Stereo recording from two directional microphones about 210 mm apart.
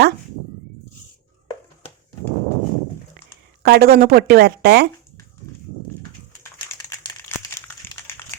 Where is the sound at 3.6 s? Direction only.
45° right (ahead or behind).